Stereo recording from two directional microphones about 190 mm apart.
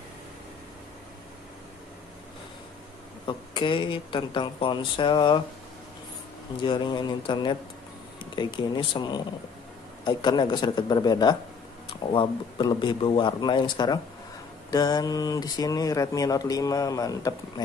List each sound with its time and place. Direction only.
3.3 s speech: 25° left (ahead or behind)
6.6 s speech: 25° left (ahead or behind)